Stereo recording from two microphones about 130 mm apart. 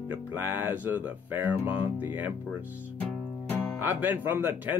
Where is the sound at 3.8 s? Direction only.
15° right (ahead or behind).